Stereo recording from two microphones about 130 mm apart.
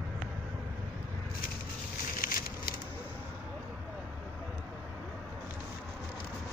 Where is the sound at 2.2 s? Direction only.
90° left.